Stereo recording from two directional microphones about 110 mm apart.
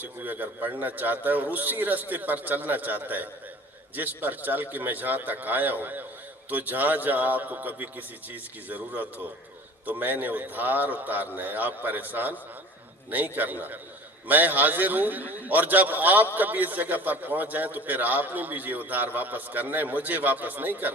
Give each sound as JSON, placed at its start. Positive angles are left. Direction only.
{"t": 0.0, "sound": "a man's voice", "side_deg": -15}